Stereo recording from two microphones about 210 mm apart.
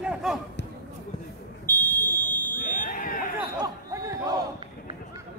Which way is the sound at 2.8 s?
40° left (ahead or behind).